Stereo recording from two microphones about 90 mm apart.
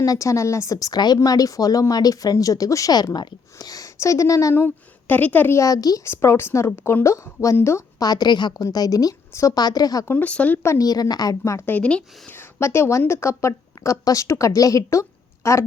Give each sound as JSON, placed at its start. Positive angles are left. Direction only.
{"t": 0.0, "sound": "a woman's voice", "side_deg": 35}
{"t": 5.5, "sound": "a woman's voice", "side_deg": 40}
{"t": 6.1, "sound": "a woman's voice", "side_deg": 30}
{"t": 8.0, "sound": "a woman's voice", "side_deg": 50}
{"t": 8.6, "sound": "a woman's voice", "side_deg": 40}
{"t": 9.6, "sound": "a woman's voice", "side_deg": 45}
{"t": 10.1, "sound": "speech", "side_deg": 15}
{"t": 10.6, "sound": "a woman's voice", "side_deg": 30}
{"t": 10.8, "sound": "a woman's voice", "side_deg": 45}
{"t": 11.6, "sound": "speech", "side_deg": 15}
{"t": 12.5, "sound": "a woman's voice", "side_deg": 30}